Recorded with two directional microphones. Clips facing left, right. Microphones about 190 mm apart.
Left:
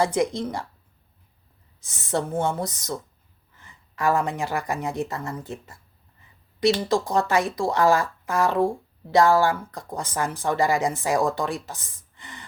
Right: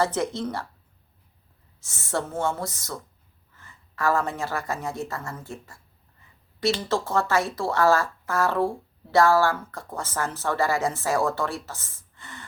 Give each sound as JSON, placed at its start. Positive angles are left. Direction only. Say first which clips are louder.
{"t": 0.0, "sound": "speech", "louder": "left 2 dB", "side_deg": 15}
{"t": 1.8, "sound": "speech", "louder": "left 3 dB", "side_deg": 20}